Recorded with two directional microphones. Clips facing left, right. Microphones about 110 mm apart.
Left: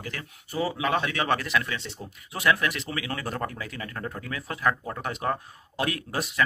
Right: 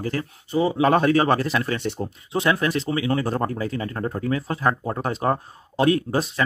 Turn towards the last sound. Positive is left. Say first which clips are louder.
# right 5 dB
turn(degrees=-30)  # may be behind; listen again after turning